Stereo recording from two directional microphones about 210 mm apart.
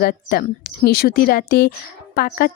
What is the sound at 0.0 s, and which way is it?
Speech, 45° left (ahead or behind).